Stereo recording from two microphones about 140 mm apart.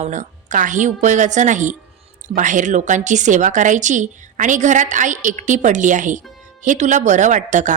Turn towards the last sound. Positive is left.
turn(degrees=-60)  # may be behind; listen again after turning